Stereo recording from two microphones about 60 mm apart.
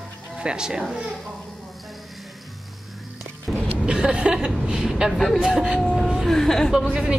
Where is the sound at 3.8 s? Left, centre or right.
Centre.